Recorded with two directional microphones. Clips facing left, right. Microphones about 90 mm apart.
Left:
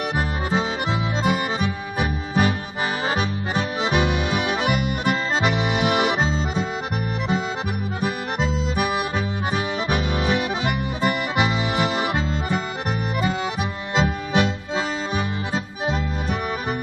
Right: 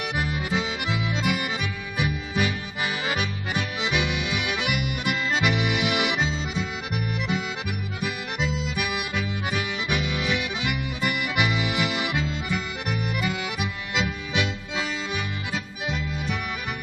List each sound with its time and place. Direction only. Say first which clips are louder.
0.5 s accordion: left 4 dB; 35° left (ahead or behind)
8.0 s accordion: left 4 dB; 40° left (ahead or behind)